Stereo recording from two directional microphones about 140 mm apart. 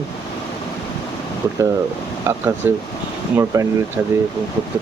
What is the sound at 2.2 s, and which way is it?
Speech, 15° right (ahead or behind).